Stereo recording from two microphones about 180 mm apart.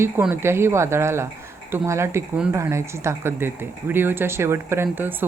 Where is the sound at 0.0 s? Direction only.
10° right (ahead or behind).